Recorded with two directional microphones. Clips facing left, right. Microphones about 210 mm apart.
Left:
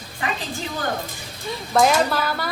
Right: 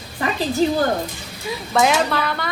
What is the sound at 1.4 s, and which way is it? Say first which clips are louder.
Speech: even; centre (ahead or behind).